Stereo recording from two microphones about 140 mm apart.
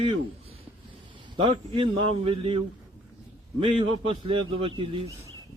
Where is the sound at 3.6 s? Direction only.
40° right (ahead or behind).